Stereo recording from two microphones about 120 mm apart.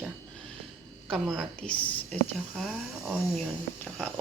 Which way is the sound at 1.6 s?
10° left (ahead or behind).